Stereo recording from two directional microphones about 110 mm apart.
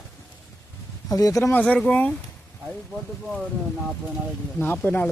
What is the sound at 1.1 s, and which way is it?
Speech, 35° left (ahead or behind).